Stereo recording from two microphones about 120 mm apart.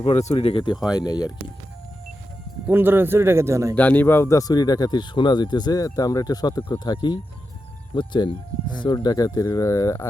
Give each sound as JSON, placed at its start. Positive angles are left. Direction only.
{"t": 0.0, "sound": "speech", "side_deg": 65}
{"t": 2.6, "sound": "speech", "side_deg": -15}
{"t": 3.8, "sound": "speech", "side_deg": 15}